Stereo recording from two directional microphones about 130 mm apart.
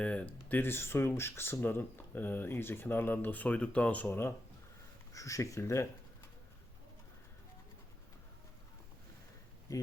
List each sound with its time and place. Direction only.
0.0 s speech: 10° left (ahead or behind)
9.7 s speech: 25° left (ahead or behind)